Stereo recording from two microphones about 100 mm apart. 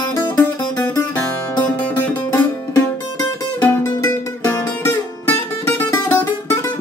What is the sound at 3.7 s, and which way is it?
Music, 25° left (ahead or behind).